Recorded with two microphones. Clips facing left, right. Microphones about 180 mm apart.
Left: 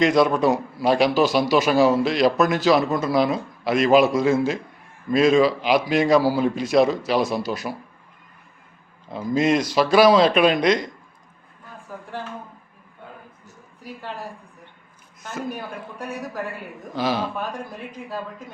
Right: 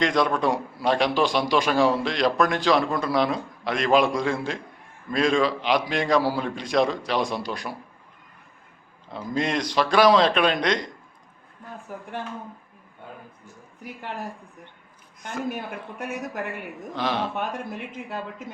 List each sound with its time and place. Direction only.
0.0 s a man's voice: 5° left (ahead or behind)
9.1 s speech: 5° left (ahead or behind)
15.4 s a man's voice: 20° right (ahead or behind)
16.9 s a man's voice: 5° left (ahead or behind)